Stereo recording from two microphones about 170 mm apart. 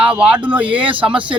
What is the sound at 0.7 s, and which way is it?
Speech, 30° right (ahead or behind).